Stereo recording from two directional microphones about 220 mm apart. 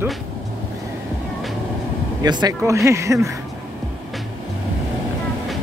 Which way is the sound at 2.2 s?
20° right (ahead or behind).